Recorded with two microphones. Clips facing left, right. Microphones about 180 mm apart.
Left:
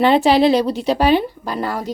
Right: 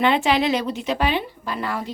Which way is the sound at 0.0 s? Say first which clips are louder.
Left 6 dB; 35° left (ahead or behind).